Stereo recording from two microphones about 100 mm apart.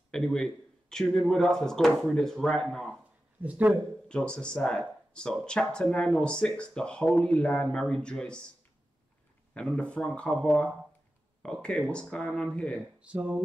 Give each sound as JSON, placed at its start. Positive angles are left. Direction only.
{"t": 0.1, "sound": "speech", "side_deg": 5}
{"t": 3.4, "sound": "speech", "side_deg": -15}
{"t": 4.1, "sound": "speech", "side_deg": 10}
{"t": 9.5, "sound": "speech", "side_deg": 10}
{"t": 13.0, "sound": "speech", "side_deg": -10}